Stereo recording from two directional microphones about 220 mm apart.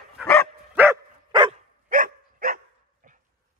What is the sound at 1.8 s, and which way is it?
Dog, 40° right (ahead or behind).